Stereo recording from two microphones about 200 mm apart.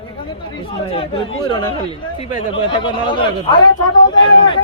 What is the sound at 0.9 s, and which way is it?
Speech, 25° left (ahead or behind).